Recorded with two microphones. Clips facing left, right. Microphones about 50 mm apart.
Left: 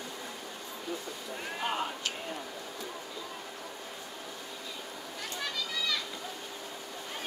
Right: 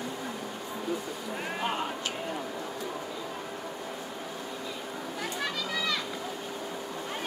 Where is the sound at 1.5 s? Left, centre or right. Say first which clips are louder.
Right 1 dB; centre.